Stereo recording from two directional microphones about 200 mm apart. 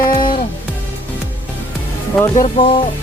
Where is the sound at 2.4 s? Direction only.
25° left (ahead or behind).